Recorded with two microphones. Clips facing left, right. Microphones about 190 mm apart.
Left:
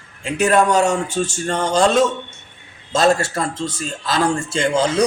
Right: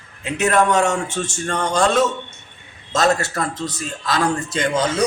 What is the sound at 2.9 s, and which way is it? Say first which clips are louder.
A man's voice: left 2 dB; 30° left (ahead or behind).